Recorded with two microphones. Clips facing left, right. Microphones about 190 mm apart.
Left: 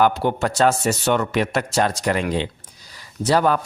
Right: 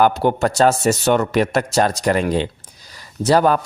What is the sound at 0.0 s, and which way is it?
Speech, 40° right (ahead or behind).